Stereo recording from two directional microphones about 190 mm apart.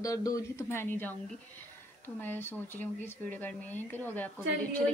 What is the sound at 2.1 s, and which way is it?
Speech, 10° left (ahead or behind).